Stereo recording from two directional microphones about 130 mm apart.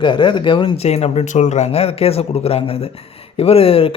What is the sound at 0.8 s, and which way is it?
Speech, 55° left (ahead or behind).